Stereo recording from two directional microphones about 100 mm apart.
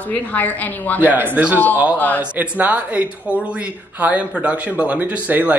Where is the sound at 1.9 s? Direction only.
15° left (ahead or behind).